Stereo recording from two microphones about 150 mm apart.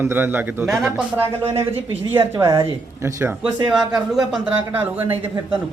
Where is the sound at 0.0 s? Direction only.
15° right (ahead or behind).